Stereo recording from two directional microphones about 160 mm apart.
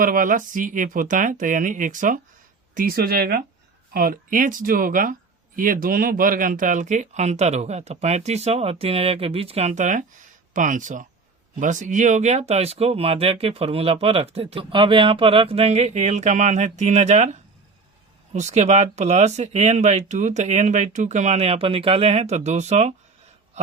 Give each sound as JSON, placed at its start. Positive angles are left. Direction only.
{"t": 0.0, "sound": "speech", "side_deg": -60}
{"t": 2.7, "sound": "speech", "side_deg": -65}
{"t": 18.3, "sound": "speech", "side_deg": -45}